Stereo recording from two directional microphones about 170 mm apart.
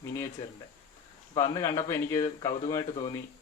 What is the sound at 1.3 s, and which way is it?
Speech, 25° left (ahead or behind).